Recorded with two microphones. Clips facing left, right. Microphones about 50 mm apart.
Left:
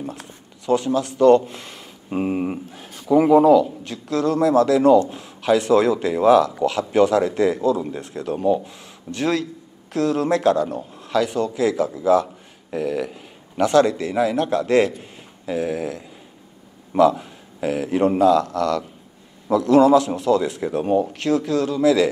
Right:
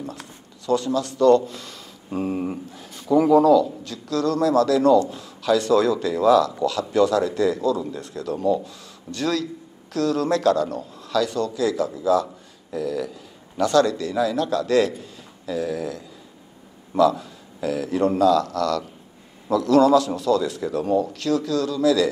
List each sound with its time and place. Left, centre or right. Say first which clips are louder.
0.0 s a man's voice: left 2 dB; left